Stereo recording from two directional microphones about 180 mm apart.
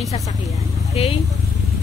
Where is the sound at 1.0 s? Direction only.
30° left (ahead or behind).